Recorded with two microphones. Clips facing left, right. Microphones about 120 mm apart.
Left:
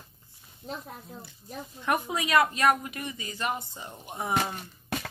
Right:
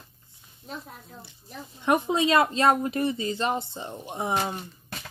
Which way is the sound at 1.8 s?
25° right (ahead or behind).